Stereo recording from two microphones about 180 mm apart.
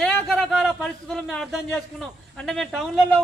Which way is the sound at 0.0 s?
Centre (ahead or behind).